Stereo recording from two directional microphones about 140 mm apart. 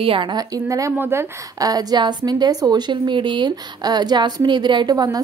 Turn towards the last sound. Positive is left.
turn(degrees=-30)  # may be behind; listen again after turning